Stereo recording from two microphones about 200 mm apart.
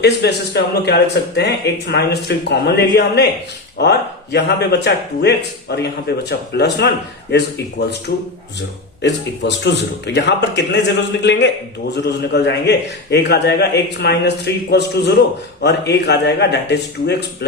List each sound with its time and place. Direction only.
0.0 s speech: 55° left (ahead or behind)